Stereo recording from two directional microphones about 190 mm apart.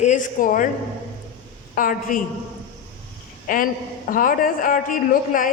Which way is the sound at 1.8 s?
45° left (ahead or behind).